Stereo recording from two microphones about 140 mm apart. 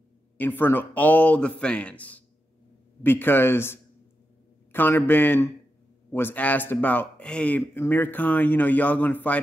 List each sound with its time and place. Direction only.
0.4 s speech: 15° left (ahead or behind)